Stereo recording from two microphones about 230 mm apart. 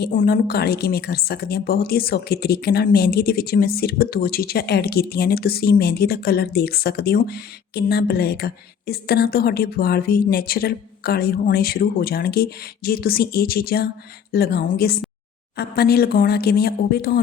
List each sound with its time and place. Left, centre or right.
0.0 s a woman's voice: left